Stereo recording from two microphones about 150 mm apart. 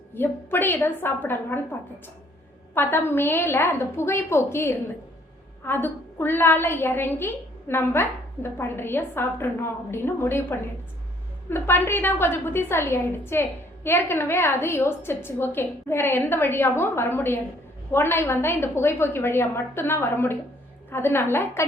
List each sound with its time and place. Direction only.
0.1 s a woman's voice: 15° left (ahead or behind)
2.7 s a woman's voice: 15° left (ahead or behind)